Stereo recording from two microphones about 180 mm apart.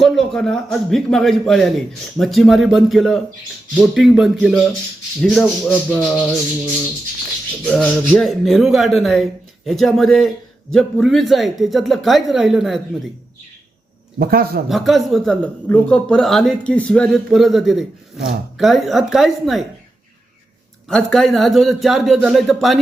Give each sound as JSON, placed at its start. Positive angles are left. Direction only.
{"t": 0.0, "sound": "a man's voice", "side_deg": 5}
{"t": 7.6, "sound": "a man's voice", "side_deg": 0}
{"t": 14.2, "sound": "a man's voice", "side_deg": -60}
{"t": 14.7, "sound": "a man's voice", "side_deg": 0}
{"t": 20.8, "sound": "a man's voice", "side_deg": 0}